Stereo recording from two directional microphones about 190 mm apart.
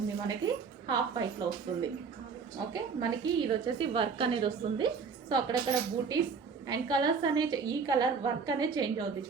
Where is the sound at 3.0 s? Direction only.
20° right (ahead or behind).